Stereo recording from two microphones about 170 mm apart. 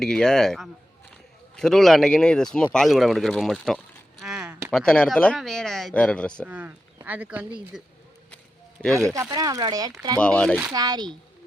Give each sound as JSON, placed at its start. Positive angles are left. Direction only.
{"t": 0.0, "sound": "speech", "side_deg": 5}
{"t": 4.2, "sound": "a sound", "side_deg": -5}
{"t": 4.7, "sound": "speech", "side_deg": 5}
{"t": 6.5, "sound": "speech", "side_deg": -10}
{"t": 8.8, "sound": "speech", "side_deg": 5}
{"t": 9.3, "sound": "speech", "side_deg": -25}
{"t": 10.2, "sound": "speech", "side_deg": 5}
{"t": 10.7, "sound": "speech", "side_deg": -25}